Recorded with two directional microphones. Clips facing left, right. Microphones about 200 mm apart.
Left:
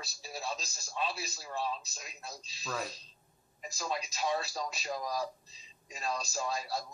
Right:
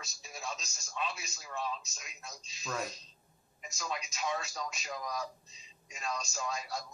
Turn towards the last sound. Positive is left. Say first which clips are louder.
# left 3 dB
turn(degrees=35)  # may be behind; listen again after turning